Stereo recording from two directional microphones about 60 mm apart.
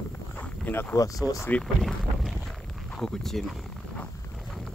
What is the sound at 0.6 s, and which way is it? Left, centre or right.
Speech, left.